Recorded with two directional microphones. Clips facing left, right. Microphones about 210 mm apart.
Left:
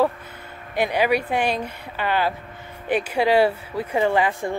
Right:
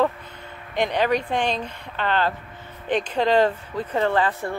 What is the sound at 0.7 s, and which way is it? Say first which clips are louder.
Speech: left 1 dB; 10° left (ahead or behind).